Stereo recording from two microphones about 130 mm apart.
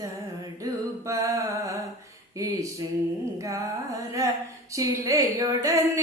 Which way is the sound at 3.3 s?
25° right (ahead or behind).